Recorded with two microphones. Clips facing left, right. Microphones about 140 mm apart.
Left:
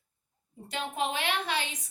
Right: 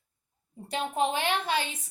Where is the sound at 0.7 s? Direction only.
35° right (ahead or behind).